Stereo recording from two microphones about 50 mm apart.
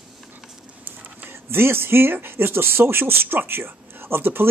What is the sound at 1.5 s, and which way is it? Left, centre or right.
Speech, right.